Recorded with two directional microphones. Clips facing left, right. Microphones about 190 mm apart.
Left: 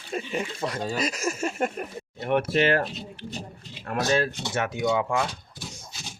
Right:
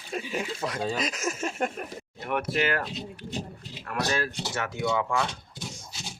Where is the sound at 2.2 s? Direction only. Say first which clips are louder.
Left 5 dB; 25° left (ahead or behind).